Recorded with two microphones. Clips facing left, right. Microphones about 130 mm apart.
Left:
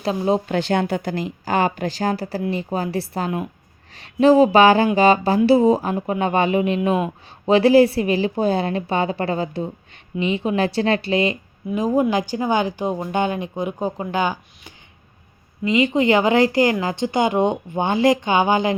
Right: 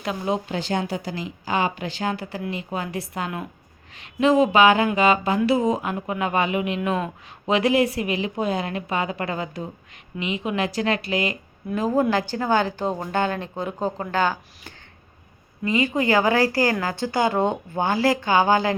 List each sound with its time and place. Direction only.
0.0 s a woman's voice: 35° left (ahead or behind)
0.4 s a woman's voice: 60° left (ahead or behind); by 18.8 s 20° left (ahead or behind)